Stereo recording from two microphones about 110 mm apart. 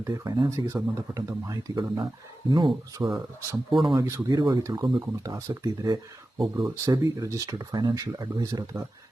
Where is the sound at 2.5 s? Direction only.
45° right (ahead or behind).